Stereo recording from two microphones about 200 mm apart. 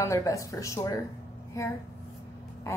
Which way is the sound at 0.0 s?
15° left (ahead or behind).